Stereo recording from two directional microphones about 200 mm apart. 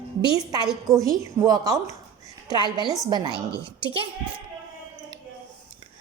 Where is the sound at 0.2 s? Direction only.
20° right (ahead or behind).